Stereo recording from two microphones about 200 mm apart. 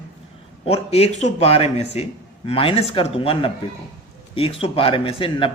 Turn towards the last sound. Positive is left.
turn(degrees=25)  # may be behind; listen again after turning